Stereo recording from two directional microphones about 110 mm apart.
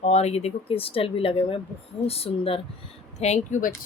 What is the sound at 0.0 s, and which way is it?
Speech, 75° left (ahead or behind).